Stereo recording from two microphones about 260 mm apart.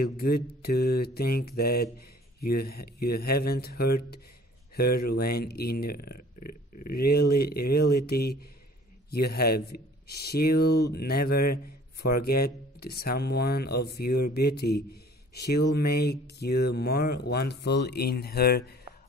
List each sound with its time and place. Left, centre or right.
0.0 s speech: left